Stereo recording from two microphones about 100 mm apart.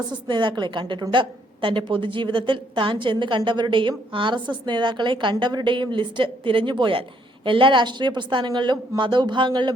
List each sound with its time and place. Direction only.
0.1 s a woman's voice: 50° right (ahead or behind)